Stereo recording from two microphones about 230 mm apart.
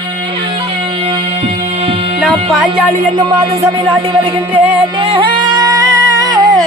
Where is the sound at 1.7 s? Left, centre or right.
Right.